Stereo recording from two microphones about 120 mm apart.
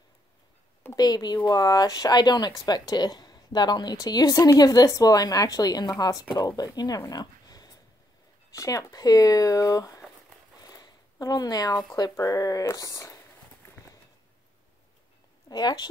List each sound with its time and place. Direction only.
0.9 s speech: 35° left (ahead or behind)
10.6 s a sound: 35° left (ahead or behind)
15.5 s speech: 35° left (ahead or behind)